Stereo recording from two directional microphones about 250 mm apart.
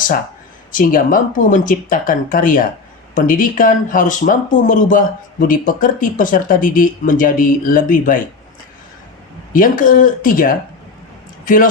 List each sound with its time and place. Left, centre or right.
0.7 s speech: left
9.5 s speech: left